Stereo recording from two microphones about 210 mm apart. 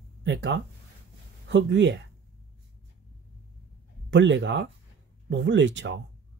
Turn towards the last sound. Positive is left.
turn(degrees=-60)  # may be behind; listen again after turning